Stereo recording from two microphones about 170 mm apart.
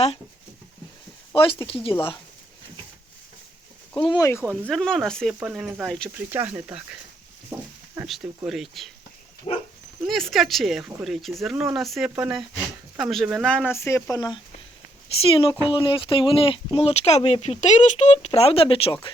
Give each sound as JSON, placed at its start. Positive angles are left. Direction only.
{"t": 1.3, "sound": "speech", "side_deg": 30}
{"t": 3.9, "sound": "speech", "side_deg": 25}
{"t": 4.7, "sound": "speech", "side_deg": 5}
{"t": 5.8, "sound": "speech", "side_deg": 5}
{"t": 6.1, "sound": "speech", "side_deg": -10}
{"t": 7.5, "sound": "a sound", "side_deg": -10}
{"t": 8.4, "sound": "speech", "side_deg": 0}
{"t": 10.0, "sound": "speech", "side_deg": 0}
{"t": 15.4, "sound": "speech", "side_deg": 30}